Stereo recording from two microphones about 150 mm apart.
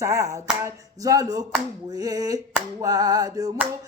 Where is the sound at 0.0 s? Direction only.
20° right (ahead or behind).